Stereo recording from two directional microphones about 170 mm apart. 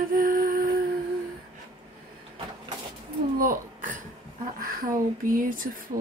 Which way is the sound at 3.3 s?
50° right (ahead or behind).